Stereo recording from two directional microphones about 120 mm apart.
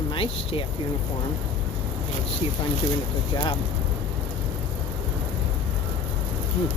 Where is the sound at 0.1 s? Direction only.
50° left (ahead or behind).